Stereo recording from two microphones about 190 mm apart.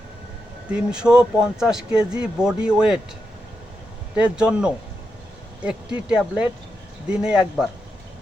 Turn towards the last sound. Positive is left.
turn(degrees=-5)  # may be behind; listen again after turning